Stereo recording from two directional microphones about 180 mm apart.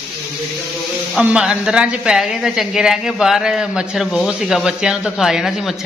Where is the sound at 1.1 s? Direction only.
5° right (ahead or behind).